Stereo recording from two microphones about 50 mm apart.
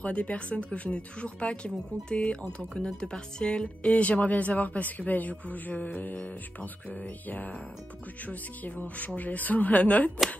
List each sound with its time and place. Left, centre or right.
0.0 s speech: left
3.9 s speech: left